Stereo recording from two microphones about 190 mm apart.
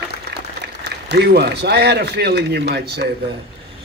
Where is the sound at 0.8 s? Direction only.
60° right (ahead or behind).